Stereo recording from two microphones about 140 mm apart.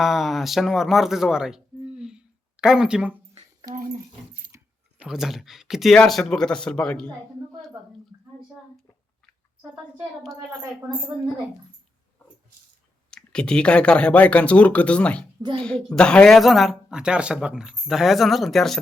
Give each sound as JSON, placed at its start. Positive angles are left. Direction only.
{"t": 0.0, "sound": "speech", "side_deg": 0}
{"t": 4.5, "sound": "keys jangling", "side_deg": -20}
{"t": 4.9, "sound": "speech", "side_deg": -5}
{"t": 13.1, "sound": "speech", "side_deg": 5}
{"t": 15.4, "sound": "a woman's voice", "side_deg": -35}
{"t": 15.6, "sound": "speech", "side_deg": 5}